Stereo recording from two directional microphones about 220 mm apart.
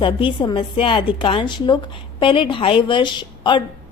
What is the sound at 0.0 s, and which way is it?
A woman's voice, 25° left (ahead or behind).